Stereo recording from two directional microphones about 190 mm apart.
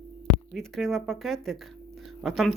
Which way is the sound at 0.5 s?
Centre (ahead or behind).